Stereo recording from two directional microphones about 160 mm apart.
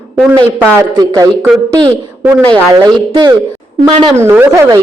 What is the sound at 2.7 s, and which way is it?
Speech, 25° right (ahead or behind).